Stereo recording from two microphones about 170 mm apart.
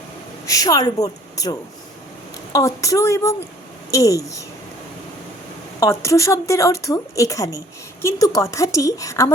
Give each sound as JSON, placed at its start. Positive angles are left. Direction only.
{"t": 0.4, "sound": "speech", "side_deg": 20}
{"t": 5.8, "sound": "speech", "side_deg": 20}